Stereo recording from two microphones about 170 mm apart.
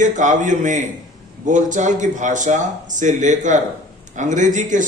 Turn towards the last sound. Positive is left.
turn(degrees=-50)  # may be behind; listen again after turning